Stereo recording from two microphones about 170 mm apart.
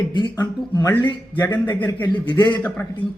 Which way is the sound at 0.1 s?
25° left (ahead or behind).